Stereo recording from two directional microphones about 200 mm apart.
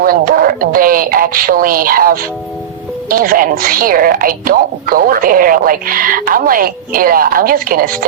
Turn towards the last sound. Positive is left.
turn(degrees=-45)  # may be behind; listen again after turning